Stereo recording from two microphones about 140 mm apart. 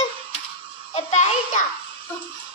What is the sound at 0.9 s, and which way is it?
Speech, 55° left (ahead or behind).